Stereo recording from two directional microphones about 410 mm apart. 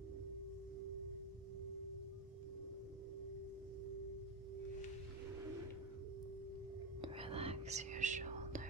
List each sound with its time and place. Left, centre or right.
7.0 s whispering: centre